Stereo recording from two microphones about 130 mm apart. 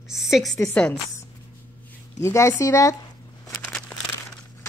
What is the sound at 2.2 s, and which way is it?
Speech, 20° left (ahead or behind).